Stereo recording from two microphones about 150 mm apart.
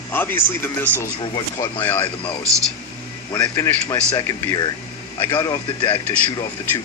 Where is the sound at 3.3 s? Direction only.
20° left (ahead or behind).